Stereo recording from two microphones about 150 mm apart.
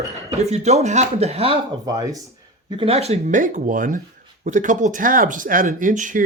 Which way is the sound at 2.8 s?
40° right (ahead or behind).